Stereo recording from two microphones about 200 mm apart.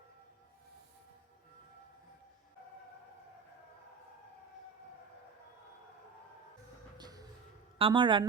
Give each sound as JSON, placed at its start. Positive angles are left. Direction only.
{"t": 6.9, "sound": "music", "side_deg": -20}
{"t": 7.8, "sound": "speech", "side_deg": -25}